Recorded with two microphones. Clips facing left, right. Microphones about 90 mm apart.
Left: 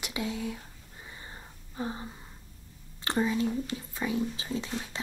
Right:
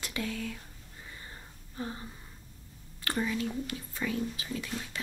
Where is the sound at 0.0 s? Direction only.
15° left (ahead or behind).